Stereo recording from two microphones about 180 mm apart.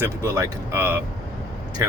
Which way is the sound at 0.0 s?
15° right (ahead or behind).